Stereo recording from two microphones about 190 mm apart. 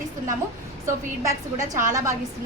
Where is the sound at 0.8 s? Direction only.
15° right (ahead or behind).